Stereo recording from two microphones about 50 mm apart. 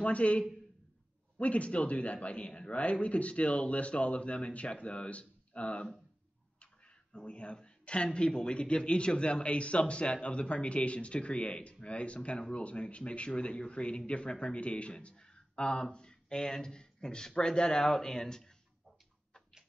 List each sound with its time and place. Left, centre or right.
0.0 s speech: left